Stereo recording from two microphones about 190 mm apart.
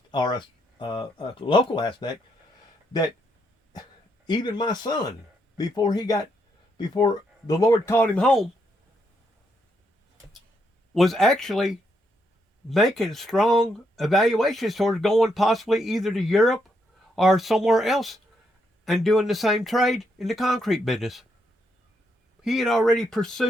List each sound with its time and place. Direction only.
0.1 s speech: 25° left (ahead or behind)
4.3 s speech: 25° left (ahead or behind); by 8.4 s centre (ahead or behind)
10.9 s speech: centre (ahead or behind)
22.4 s speech: centre (ahead or behind)